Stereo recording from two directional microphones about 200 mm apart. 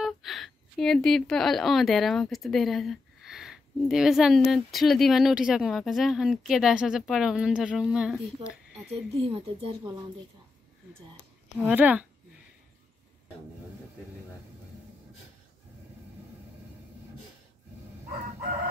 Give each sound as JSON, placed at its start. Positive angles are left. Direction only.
{"t": 0.0, "sound": "a woman's voice", "side_deg": 0}
{"t": 9.1, "sound": "speech", "side_deg": -30}
{"t": 11.5, "sound": "speech", "side_deg": -10}